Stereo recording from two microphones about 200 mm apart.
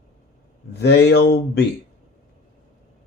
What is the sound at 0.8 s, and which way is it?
Speech, 55° left (ahead or behind).